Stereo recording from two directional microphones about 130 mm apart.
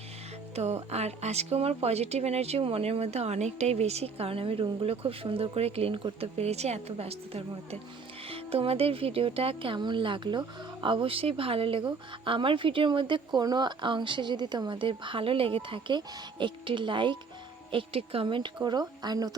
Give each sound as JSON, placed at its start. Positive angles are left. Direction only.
{"t": 0.5, "sound": "speech", "side_deg": -55}